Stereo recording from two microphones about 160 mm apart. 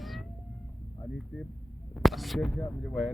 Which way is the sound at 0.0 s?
Centre (ahead or behind).